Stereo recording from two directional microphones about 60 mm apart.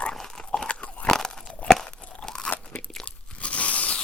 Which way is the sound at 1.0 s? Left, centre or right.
Centre.